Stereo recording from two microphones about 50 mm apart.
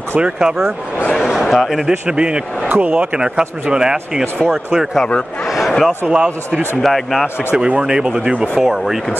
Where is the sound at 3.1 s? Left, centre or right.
Centre.